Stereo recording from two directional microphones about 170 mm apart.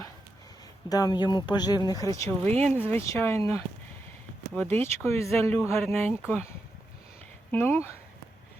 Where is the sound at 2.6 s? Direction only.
10° right (ahead or behind).